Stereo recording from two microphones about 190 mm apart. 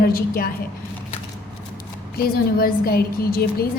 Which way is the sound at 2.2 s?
50° left (ahead or behind).